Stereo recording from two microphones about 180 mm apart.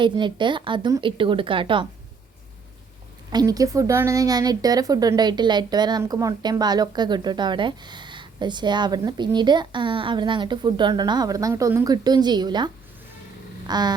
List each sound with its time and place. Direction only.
0.0 s a woman's voice: 25° right (ahead or behind)
3.3 s a woman's voice: 20° right (ahead or behind)
13.7 s vehicle: 25° right (ahead or behind)